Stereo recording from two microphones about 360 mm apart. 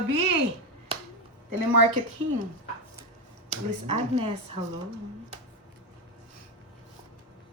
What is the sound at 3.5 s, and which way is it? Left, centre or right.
Speech, centre.